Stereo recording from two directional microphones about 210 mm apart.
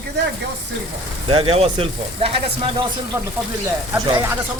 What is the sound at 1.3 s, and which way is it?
Speech, 25° right (ahead or behind).